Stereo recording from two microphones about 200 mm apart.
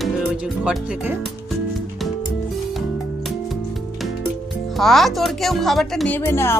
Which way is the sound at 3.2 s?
Centre (ahead or behind).